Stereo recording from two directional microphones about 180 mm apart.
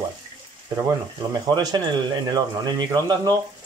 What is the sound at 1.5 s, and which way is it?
Speech, 20° right (ahead or behind).